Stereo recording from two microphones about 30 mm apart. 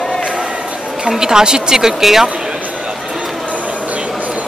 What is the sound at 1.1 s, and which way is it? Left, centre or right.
Speech, right.